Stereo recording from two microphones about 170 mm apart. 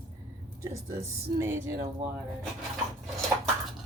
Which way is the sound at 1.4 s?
15° right (ahead or behind).